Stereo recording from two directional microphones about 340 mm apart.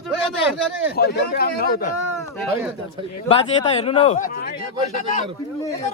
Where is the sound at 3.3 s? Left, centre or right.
Centre.